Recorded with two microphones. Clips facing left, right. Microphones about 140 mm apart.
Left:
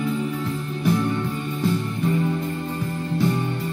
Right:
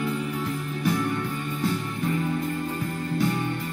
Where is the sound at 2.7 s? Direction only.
20° left (ahead or behind).